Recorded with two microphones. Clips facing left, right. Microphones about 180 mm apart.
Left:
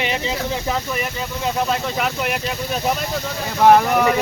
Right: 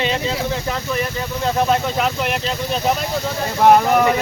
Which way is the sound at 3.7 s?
10° right (ahead or behind).